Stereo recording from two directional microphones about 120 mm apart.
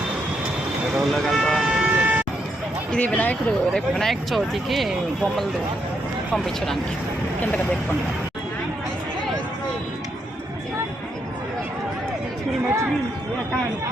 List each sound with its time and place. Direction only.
0.9 s speech: centre (ahead or behind)
2.9 s speech: 15° left (ahead or behind)
6.3 s speech: 5° left (ahead or behind)
12.6 s a sound: 20° right (ahead or behind)